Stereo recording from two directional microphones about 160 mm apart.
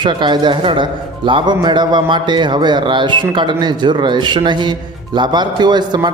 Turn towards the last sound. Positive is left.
turn(degrees=-25)  # may be behind; listen again after turning